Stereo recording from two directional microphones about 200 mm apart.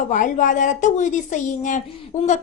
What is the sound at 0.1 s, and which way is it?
A woman's voice, 40° left (ahead or behind).